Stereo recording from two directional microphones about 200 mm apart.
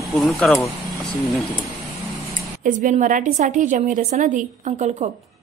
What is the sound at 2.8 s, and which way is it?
A woman's voice, 40° right (ahead or behind).